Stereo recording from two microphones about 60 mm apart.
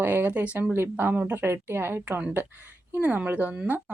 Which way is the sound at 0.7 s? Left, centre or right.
Right.